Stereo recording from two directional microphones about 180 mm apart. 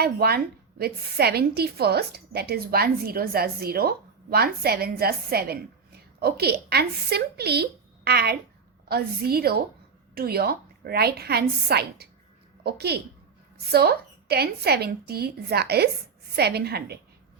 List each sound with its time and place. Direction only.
0.0 s a woman's voice: 60° right (ahead or behind)